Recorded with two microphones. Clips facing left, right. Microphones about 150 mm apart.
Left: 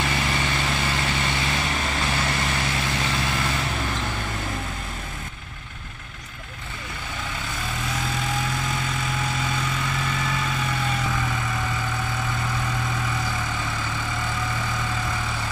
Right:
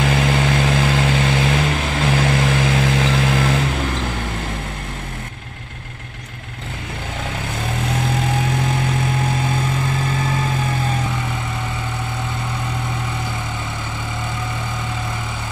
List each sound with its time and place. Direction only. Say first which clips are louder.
0.0 s vehicle: right 7 dB; 90° right
7.6 s vehicle: right 7 dB; 65° right (ahead or behind)